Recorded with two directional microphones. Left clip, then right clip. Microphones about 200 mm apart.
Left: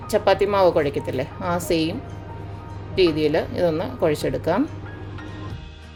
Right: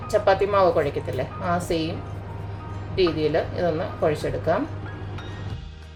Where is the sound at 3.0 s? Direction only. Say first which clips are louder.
Left 3 dB; 55° left (ahead or behind).